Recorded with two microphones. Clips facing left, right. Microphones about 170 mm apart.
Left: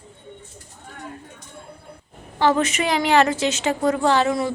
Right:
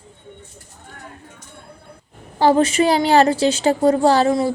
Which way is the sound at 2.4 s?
35° right (ahead or behind).